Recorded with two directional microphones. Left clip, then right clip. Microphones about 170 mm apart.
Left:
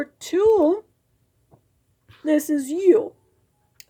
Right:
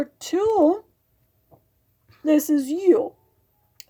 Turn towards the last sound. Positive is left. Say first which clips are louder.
# left 1 dB
turn(degrees=-20)  # may be behind; listen again after turning